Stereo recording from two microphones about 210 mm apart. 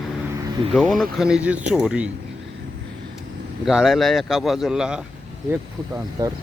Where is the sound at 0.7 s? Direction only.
Centre (ahead or behind).